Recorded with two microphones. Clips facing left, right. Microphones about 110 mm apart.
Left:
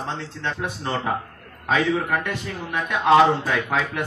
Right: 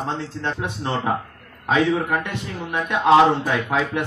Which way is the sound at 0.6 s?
20° right (ahead or behind).